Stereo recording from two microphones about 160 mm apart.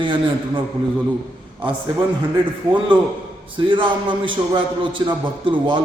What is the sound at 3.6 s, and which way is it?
A man's voice, 30° right (ahead or behind).